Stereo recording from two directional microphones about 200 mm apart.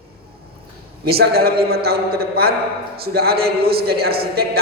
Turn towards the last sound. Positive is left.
turn(degrees=-50)  # may be behind; listen again after turning